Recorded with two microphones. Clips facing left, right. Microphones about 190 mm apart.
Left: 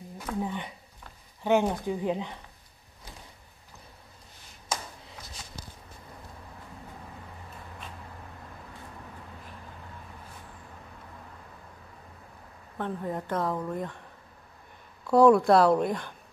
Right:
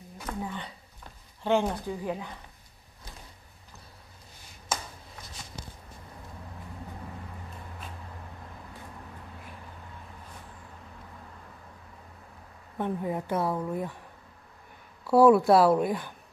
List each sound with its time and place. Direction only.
0.4 s speech: 15° left (ahead or behind)
5.6 s a sound: 20° right (ahead or behind)
12.7 s speech: 10° right (ahead or behind)
15.0 s speech: 5° right (ahead or behind)